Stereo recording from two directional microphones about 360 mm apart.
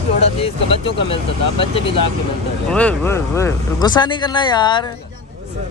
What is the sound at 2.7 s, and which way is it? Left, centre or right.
Speech, centre.